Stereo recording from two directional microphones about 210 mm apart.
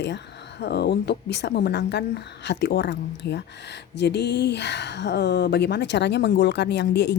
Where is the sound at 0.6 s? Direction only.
50° left (ahead or behind).